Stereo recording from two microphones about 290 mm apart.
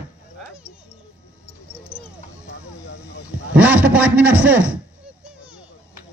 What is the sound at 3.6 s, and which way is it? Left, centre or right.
A man's voice, centre.